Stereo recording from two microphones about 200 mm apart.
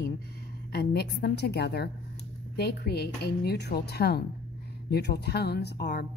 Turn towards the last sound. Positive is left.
turn(degrees=55)  # may be behind; listen again after turning